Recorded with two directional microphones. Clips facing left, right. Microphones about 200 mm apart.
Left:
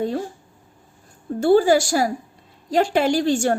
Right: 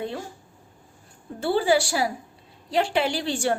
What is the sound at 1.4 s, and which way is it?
A woman's voice, 45° left (ahead or behind).